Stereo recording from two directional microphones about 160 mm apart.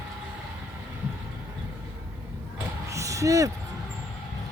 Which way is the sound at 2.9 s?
20° right (ahead or behind).